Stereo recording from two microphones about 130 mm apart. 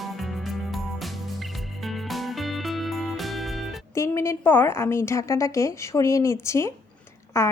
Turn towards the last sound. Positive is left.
turn(degrees=20)  # may be behind; listen again after turning